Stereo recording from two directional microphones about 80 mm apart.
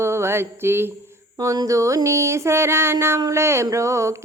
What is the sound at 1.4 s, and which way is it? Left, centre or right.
Speech, right.